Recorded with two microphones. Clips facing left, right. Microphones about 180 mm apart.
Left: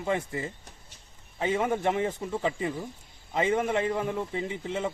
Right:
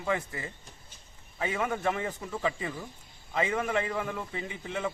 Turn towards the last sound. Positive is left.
turn(degrees=25)  # may be behind; listen again after turning